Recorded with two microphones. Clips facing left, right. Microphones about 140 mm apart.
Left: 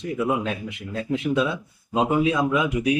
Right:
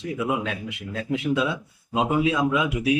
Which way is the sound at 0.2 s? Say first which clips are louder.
Left 3 dB; centre (ahead or behind).